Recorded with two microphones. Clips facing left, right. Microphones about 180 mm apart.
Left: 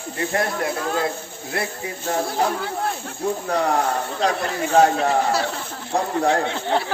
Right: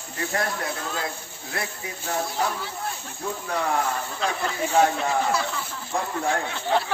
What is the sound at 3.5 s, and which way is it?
Speech, 35° left (ahead or behind).